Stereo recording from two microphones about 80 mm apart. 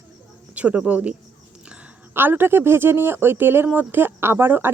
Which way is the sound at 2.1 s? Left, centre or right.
Right.